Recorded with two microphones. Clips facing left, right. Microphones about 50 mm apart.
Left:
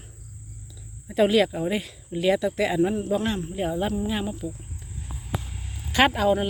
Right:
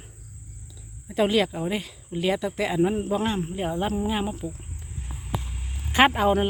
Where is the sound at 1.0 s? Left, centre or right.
Centre.